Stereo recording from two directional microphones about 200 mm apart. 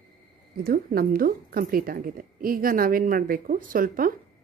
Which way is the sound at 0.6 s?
45° right (ahead or behind).